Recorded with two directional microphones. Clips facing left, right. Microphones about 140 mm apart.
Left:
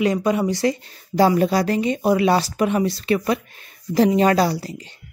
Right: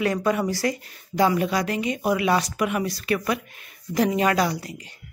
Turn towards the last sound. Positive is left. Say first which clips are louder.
# left 4 dB
turn(degrees=30)  # may be behind; listen again after turning